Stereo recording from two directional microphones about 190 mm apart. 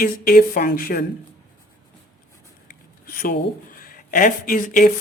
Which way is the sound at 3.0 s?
50° left (ahead or behind).